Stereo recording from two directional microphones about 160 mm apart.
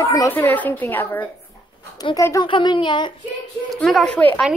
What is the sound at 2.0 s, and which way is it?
Speech, 20° left (ahead or behind).